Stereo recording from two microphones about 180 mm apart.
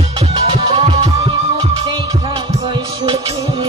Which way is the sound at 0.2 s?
30° right (ahead or behind).